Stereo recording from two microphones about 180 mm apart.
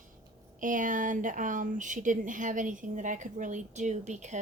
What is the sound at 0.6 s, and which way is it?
Speech, 45° right (ahead or behind).